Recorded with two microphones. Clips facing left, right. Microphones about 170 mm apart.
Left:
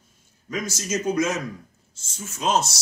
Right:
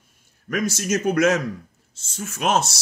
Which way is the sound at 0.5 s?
65° right (ahead or behind).